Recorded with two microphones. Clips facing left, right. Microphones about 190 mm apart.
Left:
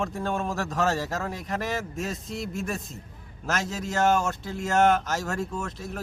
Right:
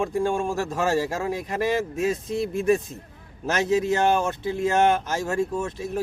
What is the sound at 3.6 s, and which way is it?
A man's voice, 15° right (ahead or behind).